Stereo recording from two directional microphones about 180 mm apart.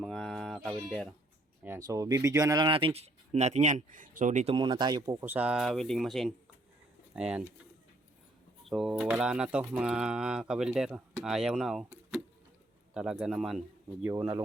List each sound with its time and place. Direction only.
0.0 s a sound: centre (ahead or behind)
0.9 s speech: centre (ahead or behind)
1.6 s speech: 15° right (ahead or behind); by 4.5 s 40° right (ahead or behind)
4.5 s speech: 25° right (ahead or behind); by 7.4 s 5° right (ahead or behind)
8.6 s speech: centre (ahead or behind)
12.9 s speech: 5° right (ahead or behind)